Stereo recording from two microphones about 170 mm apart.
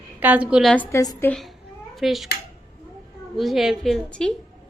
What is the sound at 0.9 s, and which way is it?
Speech, 15° left (ahead or behind).